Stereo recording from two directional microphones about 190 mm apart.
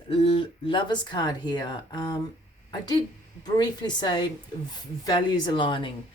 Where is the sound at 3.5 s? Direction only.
20° left (ahead or behind).